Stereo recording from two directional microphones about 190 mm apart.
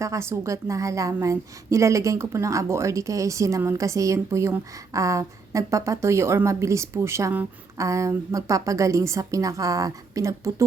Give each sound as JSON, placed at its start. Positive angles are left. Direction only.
{"t": 0.0, "sound": "a woman's voice", "side_deg": -15}